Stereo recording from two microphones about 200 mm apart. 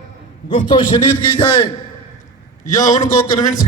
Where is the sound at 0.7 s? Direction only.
25° left (ahead or behind).